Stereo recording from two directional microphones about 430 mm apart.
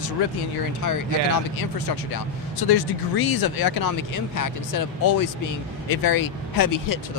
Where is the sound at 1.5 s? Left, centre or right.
Left.